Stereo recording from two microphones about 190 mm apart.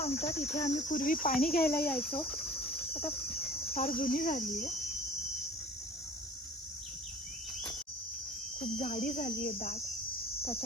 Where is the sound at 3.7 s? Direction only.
50° left (ahead or behind).